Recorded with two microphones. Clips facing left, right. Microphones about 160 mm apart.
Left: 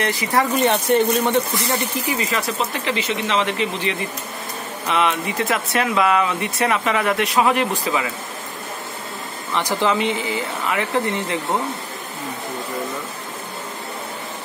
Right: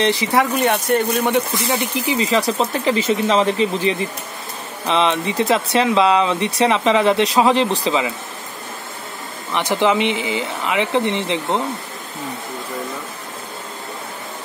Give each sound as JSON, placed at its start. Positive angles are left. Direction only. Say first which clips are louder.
{"t": 0.0, "sound": "speech", "louder": "right 5 dB", "side_deg": -25}
{"t": 0.3, "sound": "speech", "louder": "right 1 dB", "side_deg": -10}
{"t": 2.0, "sound": "speech", "louder": "right 5 dB", "side_deg": -25}
{"t": 9.5, "sound": "speech", "louder": "right 3 dB", "side_deg": -20}